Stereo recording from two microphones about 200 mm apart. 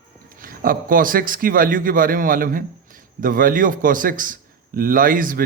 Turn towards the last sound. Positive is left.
turn(degrees=-45)  # may be behind; listen again after turning